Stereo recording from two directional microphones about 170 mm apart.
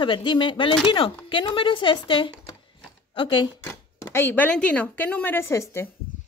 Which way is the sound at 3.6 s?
15° left (ahead or behind).